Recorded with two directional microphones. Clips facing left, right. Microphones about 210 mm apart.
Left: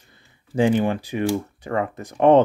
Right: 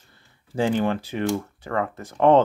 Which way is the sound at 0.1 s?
15° left (ahead or behind).